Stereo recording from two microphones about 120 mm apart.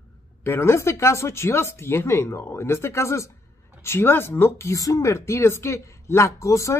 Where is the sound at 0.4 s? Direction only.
20° left (ahead or behind).